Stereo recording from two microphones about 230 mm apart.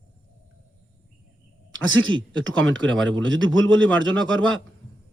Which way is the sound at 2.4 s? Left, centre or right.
Right.